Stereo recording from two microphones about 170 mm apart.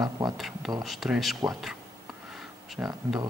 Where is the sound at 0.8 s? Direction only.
Centre (ahead or behind).